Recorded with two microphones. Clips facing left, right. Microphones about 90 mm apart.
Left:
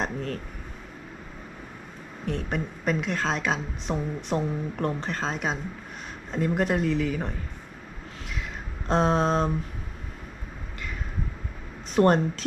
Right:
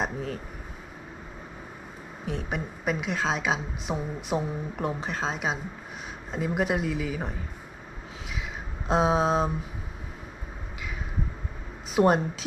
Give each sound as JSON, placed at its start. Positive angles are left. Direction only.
{"t": 0.0, "sound": "speech", "side_deg": -5}
{"t": 2.2, "sound": "a woman's voice", "side_deg": -5}
{"t": 8.9, "sound": "a woman's voice", "side_deg": -5}
{"t": 11.9, "sound": "a woman's voice", "side_deg": -5}